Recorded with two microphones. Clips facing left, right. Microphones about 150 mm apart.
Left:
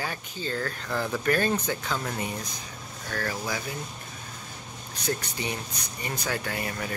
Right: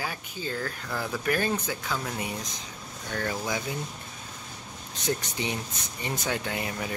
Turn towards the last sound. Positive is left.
turn(degrees=-15)  # may be behind; listen again after turning